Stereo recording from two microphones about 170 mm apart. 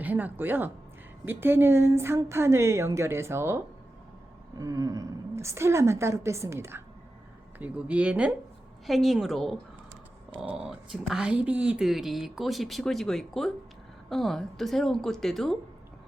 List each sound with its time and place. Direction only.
0.0 s a woman's voice: 10° right (ahead or behind)